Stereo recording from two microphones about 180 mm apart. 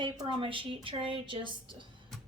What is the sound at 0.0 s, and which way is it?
A woman's voice, 25° right (ahead or behind).